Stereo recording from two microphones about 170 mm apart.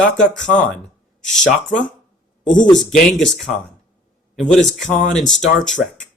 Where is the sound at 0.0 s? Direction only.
5° left (ahead or behind).